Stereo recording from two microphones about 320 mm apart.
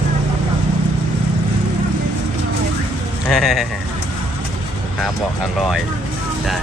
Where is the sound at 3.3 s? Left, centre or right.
Centre.